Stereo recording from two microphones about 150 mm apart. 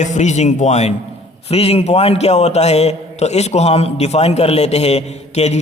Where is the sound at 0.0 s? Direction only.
55° left (ahead or behind).